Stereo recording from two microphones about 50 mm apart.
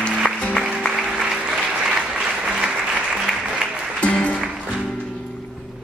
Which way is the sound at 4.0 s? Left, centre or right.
Left.